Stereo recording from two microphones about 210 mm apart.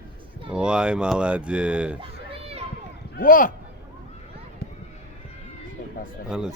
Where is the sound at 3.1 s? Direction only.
40° left (ahead or behind).